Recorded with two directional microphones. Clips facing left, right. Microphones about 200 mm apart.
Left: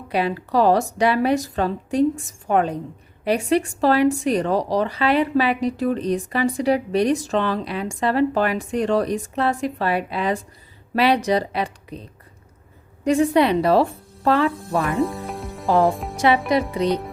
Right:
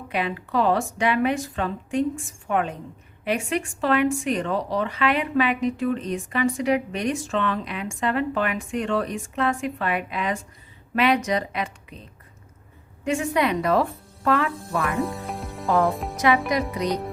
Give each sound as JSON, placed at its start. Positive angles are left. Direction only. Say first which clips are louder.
{"t": 0.1, "sound": "speech", "louder": "left 5 dB", "side_deg": 35}
{"t": 13.1, "sound": "speech", "louder": "left 6 dB", "side_deg": 35}
{"t": 15.0, "sound": "music", "louder": "left 4 dB", "side_deg": 0}
{"t": 15.9, "sound": "a woman's voice", "louder": "left 3 dB", "side_deg": 0}
{"t": 16.1, "sound": "speech", "louder": "left 2 dB", "side_deg": 30}